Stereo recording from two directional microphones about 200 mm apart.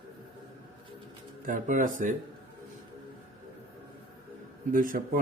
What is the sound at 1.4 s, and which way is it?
Speech, 40° right (ahead or behind).